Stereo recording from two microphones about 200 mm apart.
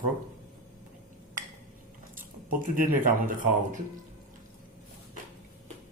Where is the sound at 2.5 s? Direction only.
40° right (ahead or behind).